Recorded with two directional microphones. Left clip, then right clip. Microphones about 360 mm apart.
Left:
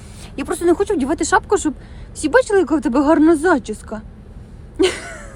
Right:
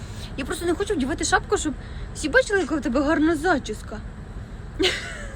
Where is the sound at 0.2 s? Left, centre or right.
Centre.